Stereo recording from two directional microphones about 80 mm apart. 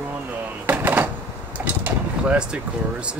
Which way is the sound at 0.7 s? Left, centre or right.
Right.